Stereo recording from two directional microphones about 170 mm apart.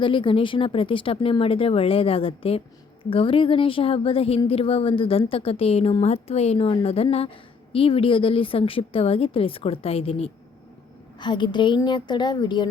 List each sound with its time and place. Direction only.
0.0 s a woman's voice: 30° left (ahead or behind)